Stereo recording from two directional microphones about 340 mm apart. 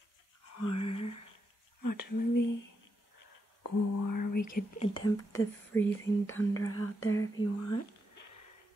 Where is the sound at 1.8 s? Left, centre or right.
Left.